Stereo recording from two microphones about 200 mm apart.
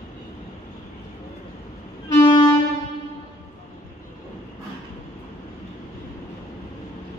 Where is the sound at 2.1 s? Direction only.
20° left (ahead or behind).